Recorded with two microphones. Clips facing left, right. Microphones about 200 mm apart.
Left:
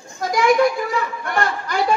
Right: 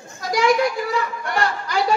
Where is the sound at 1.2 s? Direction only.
50° left (ahead or behind).